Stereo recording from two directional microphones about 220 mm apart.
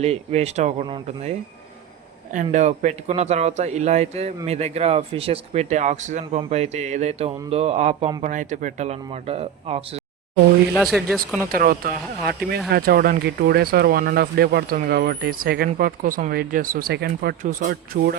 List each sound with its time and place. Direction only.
0.0 s speech: 30° right (ahead or behind)
2.3 s a man's voice: 35° right (ahead or behind)
10.8 s speech: centre (ahead or behind)
11.4 s a man's voice: 40° right (ahead or behind)